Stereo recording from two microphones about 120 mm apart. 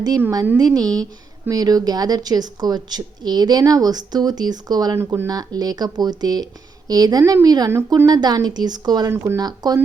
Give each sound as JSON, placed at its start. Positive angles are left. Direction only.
{"t": 0.5, "sound": "a woman's voice", "side_deg": -35}
{"t": 4.9, "sound": "speech", "side_deg": -20}
{"t": 5.3, "sound": "a woman's voice", "side_deg": -35}
{"t": 9.1, "sound": "speech", "side_deg": -20}
{"t": 9.4, "sound": "a woman's voice", "side_deg": -35}